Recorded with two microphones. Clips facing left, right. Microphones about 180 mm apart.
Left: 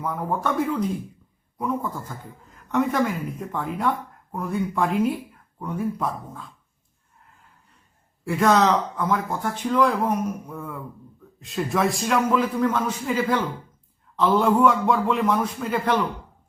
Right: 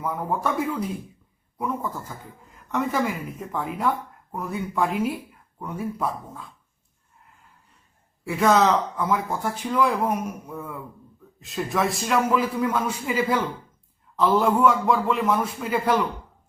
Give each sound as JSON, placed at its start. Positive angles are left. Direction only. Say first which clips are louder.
{"t": 0.3, "sound": "a woman's voice", "louder": "left 2 dB", "side_deg": -10}
{"t": 8.3, "sound": "a woman's voice", "louder": "even", "side_deg": 0}